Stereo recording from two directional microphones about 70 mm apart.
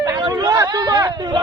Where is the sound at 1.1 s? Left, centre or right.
Right.